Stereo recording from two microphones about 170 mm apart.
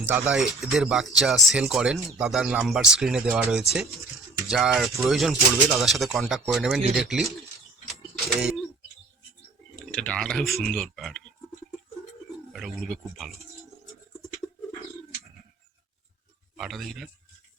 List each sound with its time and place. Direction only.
0.0 s speech: 10° right (ahead or behind)
8.4 s speech: 5° right (ahead or behind)
9.9 s speech: 5° left (ahead or behind)
12.5 s speech: centre (ahead or behind)
16.6 s speech: centre (ahead or behind)